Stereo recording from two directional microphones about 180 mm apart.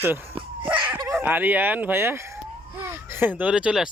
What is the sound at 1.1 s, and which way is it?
Speech, 10° right (ahead or behind).